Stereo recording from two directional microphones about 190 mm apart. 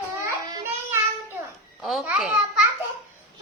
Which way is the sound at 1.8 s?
Centre (ahead or behind).